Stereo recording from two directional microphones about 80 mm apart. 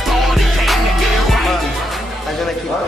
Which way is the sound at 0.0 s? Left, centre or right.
Centre.